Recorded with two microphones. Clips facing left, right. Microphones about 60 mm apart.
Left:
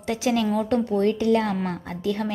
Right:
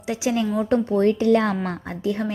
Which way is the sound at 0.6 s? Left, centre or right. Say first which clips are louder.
Right 2 dB; right.